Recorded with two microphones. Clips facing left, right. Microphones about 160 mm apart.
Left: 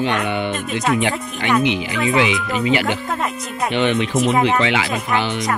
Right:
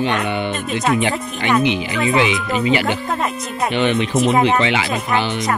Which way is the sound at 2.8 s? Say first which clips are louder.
Right 1 dB; 30° right (ahead or behind).